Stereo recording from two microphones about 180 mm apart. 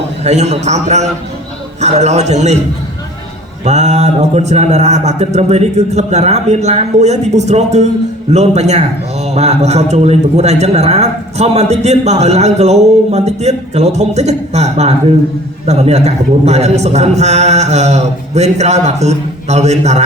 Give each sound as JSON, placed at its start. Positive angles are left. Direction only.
{"t": 0.3, "sound": "a man's voice", "side_deg": -40}
{"t": 3.6, "sound": "a man's voice", "side_deg": -40}